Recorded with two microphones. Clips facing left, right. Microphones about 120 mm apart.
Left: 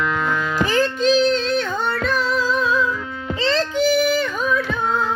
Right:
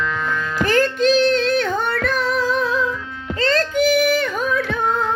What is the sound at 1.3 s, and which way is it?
Yodeling, 50° right (ahead or behind).